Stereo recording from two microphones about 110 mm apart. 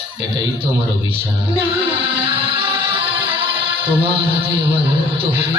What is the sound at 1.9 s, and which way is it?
Music, 55° right (ahead or behind).